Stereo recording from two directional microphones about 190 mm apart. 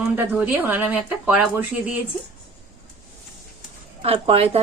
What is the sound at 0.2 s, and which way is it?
Speech, 10° right (ahead or behind).